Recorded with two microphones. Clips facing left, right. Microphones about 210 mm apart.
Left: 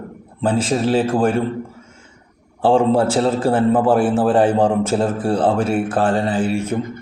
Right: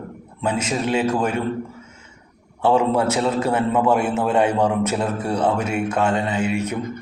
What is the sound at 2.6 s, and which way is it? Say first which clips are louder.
A man's voice: left 3 dB; 30° left (ahead or behind).